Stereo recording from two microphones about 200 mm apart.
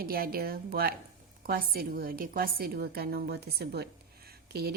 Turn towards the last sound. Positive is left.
turn(degrees=-50)  # may be behind; listen again after turning